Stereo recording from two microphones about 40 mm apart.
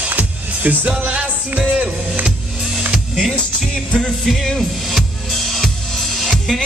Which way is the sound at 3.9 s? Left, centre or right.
Centre.